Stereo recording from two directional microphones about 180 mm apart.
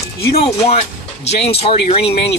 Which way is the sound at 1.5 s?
30° left (ahead or behind).